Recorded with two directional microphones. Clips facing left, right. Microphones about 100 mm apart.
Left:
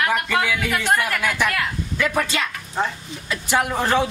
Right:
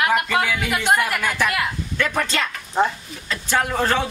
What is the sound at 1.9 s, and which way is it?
Speech, 10° left (ahead or behind).